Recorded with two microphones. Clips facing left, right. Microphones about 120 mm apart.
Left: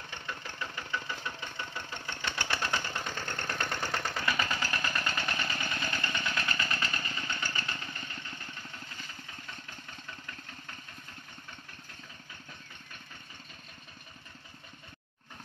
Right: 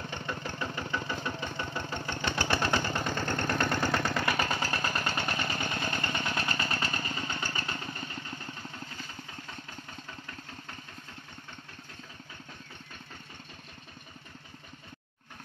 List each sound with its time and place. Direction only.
0.1 s engine: 35° right (ahead or behind)
2.7 s engine: 60° right (ahead or behind); by 4.5 s 80° right
4.5 s a sound: 35° right (ahead or behind)
6.5 s engine: 35° right (ahead or behind)
7.5 s motorcycle: 35° right (ahead or behind)